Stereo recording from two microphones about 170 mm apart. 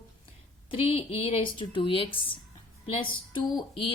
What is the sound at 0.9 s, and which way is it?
A woman's voice, 35° left (ahead or behind).